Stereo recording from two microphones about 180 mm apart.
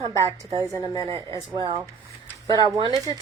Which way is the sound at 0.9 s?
20° left (ahead or behind).